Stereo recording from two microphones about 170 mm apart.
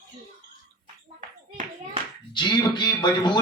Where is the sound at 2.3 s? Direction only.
25° left (ahead or behind).